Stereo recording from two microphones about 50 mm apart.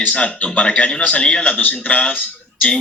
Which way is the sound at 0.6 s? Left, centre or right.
Left.